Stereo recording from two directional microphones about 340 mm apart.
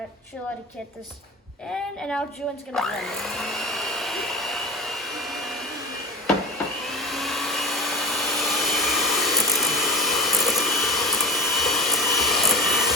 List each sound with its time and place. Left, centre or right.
1.7 s a woman's voice: centre
2.7 s vacuum cleaner: centre
6.9 s vacuum cleaner: centre